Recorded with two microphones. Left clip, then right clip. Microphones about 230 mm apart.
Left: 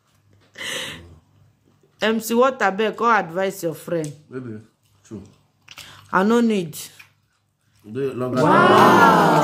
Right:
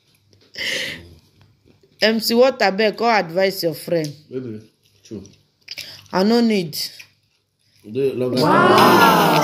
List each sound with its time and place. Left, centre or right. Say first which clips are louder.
0.6 s a sound: right 5 dB; centre
2.0 s speech: right 3 dB; centre
5.9 s speech: even; centre
7.9 s speech: right 4 dB; centre
8.5 s speech: even; centre